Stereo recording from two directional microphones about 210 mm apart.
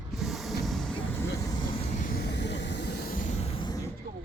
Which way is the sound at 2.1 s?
50° left (ahead or behind).